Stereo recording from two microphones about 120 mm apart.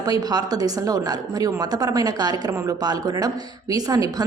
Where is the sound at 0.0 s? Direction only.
35° right (ahead or behind).